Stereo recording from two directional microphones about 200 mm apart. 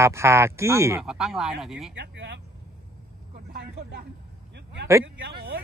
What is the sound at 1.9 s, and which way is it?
Vehicle, 60° right (ahead or behind).